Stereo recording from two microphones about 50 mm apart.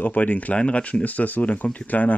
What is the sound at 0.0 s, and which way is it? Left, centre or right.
Speech, left.